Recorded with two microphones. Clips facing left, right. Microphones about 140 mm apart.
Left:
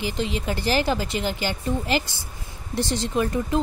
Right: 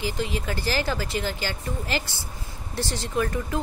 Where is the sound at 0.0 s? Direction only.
20° left (ahead or behind).